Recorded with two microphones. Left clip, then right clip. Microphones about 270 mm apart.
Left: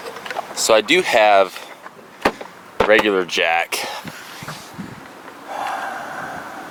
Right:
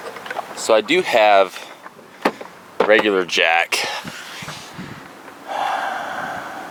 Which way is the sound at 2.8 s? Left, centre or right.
Centre.